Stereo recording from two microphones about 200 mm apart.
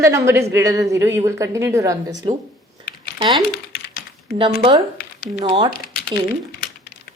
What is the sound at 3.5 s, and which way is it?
Typing, 50° left (ahead or behind).